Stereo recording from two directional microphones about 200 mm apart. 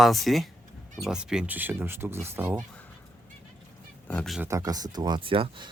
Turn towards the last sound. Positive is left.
turn(degrees=-25)  # may be behind; listen again after turning